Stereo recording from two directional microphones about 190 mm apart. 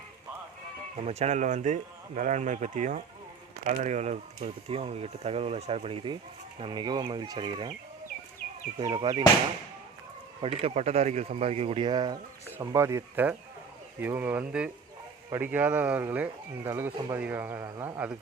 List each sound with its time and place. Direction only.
0.9 s speech: 35° right (ahead or behind)
8.8 s speech: 25° right (ahead or behind)
10.4 s speech: 30° right (ahead or behind); by 18.2 s 10° right (ahead or behind)